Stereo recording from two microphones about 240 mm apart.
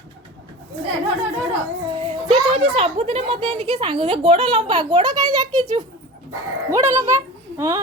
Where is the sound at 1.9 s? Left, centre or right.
Right.